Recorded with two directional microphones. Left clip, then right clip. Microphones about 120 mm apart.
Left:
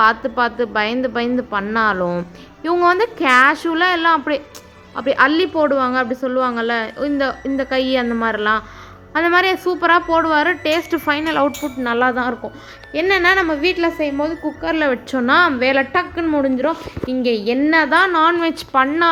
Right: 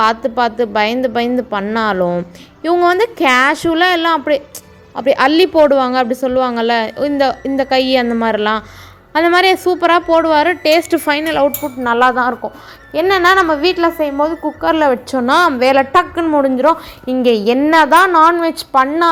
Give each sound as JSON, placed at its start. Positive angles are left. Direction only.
{"t": 0.0, "sound": "a woman's voice", "side_deg": -25}
{"t": 11.4, "sound": "a woman's voice", "side_deg": 0}
{"t": 12.9, "sound": "a woman's voice", "side_deg": -5}
{"t": 14.2, "sound": "a woman's voice", "side_deg": -25}
{"t": 17.3, "sound": "a woman's voice", "side_deg": -35}
{"t": 17.6, "sound": "a woman's voice", "side_deg": -15}
{"t": 18.3, "sound": "a woman's voice", "side_deg": 10}